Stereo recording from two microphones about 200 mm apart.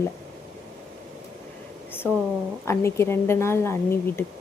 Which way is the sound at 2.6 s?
15° left (ahead or behind).